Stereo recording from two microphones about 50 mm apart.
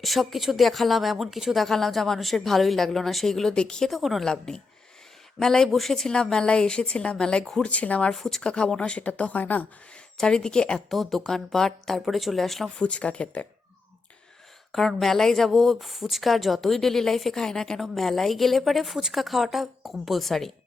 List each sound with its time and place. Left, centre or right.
0.0 s speech: centre
3.8 s speech: centre
4.3 s a woman's voice: centre
6.3 s a woman's voice: centre
8.1 s speech: centre
8.4 s speech: centre; by 9.6 s left
10.2 s a woman's voice: centre
10.8 s a woman's voice: centre
12.8 s speech: left
14.7 s speech: centre